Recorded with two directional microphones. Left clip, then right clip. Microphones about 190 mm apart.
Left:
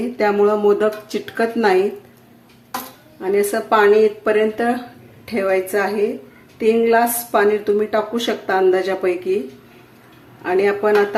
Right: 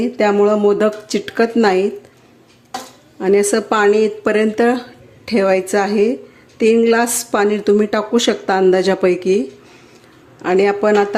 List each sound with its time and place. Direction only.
0.2 s speech: 35° right (ahead or behind)
3.2 s speech: 45° right (ahead or behind)
10.4 s speech: 45° right (ahead or behind)